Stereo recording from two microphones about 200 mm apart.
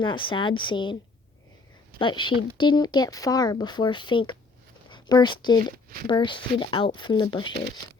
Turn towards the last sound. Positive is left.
turn(degrees=20)  # may be behind; listen again after turning